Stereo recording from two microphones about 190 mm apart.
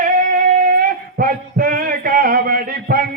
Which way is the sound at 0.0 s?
45° right (ahead or behind).